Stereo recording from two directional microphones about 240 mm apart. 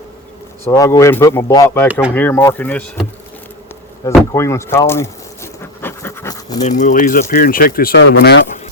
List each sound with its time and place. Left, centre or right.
0.6 s speech: centre
1.9 s speech: centre
2.1 s speech: centre
4.0 s a sound: centre
6.6 s speech: left